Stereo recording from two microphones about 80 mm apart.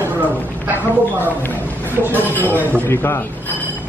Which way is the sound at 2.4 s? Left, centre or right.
Left.